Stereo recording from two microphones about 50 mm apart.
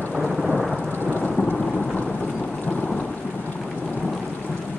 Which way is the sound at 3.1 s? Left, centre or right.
Left.